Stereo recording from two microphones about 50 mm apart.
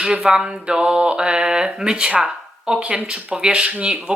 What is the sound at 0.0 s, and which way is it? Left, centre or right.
Speech, centre.